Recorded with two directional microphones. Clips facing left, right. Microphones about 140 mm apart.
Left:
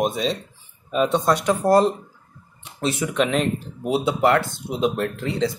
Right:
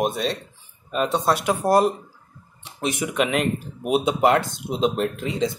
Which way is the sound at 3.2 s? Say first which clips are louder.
Left 1 dB; 5° right (ahead or behind).